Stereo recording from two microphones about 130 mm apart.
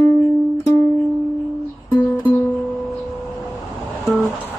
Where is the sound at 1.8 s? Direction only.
30° left (ahead or behind).